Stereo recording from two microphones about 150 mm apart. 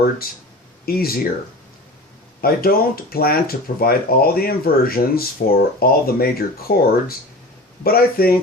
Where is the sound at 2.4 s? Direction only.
80° left.